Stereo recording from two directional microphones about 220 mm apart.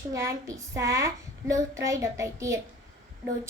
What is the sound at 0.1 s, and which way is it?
A woman's voice, 15° right (ahead or behind).